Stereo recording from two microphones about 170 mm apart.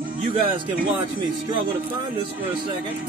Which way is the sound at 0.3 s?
30° right (ahead or behind).